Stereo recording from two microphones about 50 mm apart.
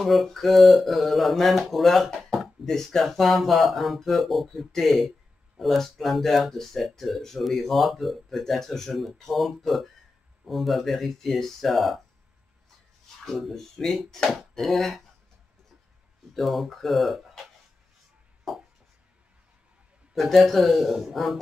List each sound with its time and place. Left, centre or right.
0.0 s speech: centre
13.2 s speech: centre
14.5 s a sound: centre
16.3 s speech: centre
18.5 s a sound: centre
20.2 s speech: centre